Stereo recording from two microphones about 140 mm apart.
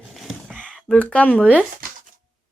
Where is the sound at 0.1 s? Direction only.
Centre (ahead or behind).